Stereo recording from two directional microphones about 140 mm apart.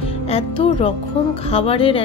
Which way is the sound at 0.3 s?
45° left (ahead or behind).